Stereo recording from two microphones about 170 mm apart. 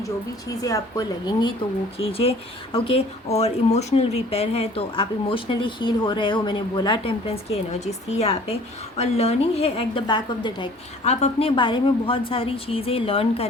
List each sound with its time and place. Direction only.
0.6 s a woman's voice: 20° left (ahead or behind)